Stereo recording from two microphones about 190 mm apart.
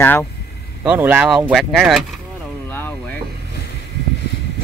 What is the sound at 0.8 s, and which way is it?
Speech, 5° right (ahead or behind).